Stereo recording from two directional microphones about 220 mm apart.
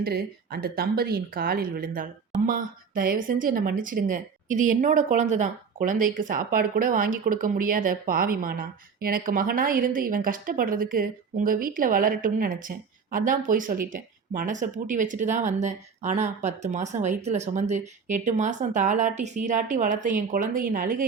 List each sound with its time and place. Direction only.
0.0 s a woman's voice: 45° right (ahead or behind)